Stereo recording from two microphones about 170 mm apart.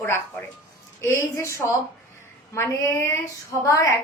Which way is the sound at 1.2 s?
15° left (ahead or behind).